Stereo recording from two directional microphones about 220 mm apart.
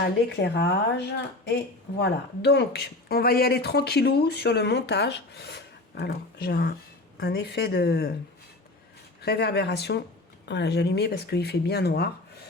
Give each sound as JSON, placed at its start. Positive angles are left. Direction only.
{"t": 0.0, "sound": "speech", "side_deg": 50}
{"t": 9.2, "sound": "speech", "side_deg": 45}